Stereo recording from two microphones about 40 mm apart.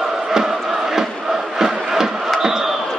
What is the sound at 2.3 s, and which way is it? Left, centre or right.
Crowd, centre.